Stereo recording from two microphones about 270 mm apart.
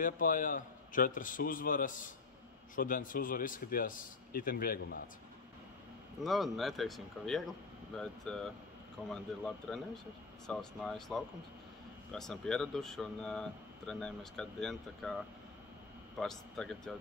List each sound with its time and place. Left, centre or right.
0.0 s a man's voice: left
6.2 s speech: centre
16.2 s speech: centre